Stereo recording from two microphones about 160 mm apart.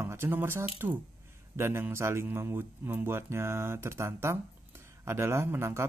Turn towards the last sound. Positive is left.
turn(degrees=-15)  # may be behind; listen again after turning